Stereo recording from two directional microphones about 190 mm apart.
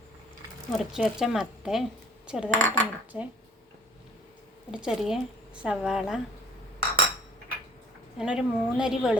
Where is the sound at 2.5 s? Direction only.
40° right (ahead or behind).